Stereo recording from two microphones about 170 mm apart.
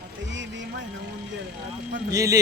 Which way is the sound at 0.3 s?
90° right.